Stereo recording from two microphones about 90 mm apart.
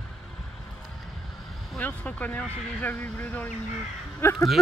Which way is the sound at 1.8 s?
15° left (ahead or behind).